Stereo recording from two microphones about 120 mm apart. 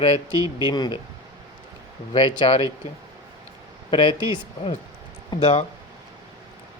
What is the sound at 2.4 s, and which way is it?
Speech, 55° left (ahead or behind).